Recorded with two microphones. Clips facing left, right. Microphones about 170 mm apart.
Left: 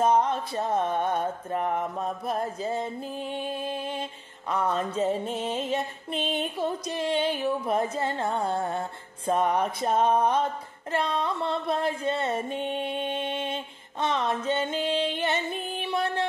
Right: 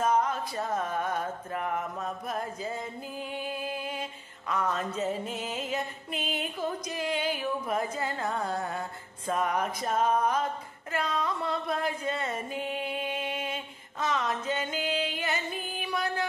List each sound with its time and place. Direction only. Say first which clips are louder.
0.0 s music: left 4 dB; 30° left (ahead or behind)